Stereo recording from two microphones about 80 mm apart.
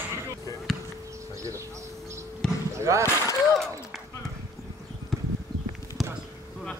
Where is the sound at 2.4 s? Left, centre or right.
Centre.